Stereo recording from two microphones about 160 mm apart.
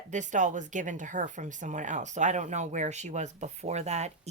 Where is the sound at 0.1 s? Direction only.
50° right (ahead or behind).